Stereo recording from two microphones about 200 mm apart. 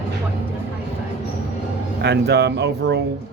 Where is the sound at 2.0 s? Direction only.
55° right (ahead or behind).